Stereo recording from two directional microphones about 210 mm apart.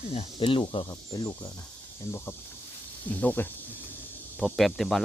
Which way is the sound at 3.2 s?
10° left (ahead or behind).